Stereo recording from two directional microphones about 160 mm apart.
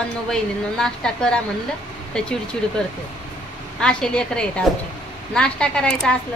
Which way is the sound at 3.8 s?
5° left (ahead or behind).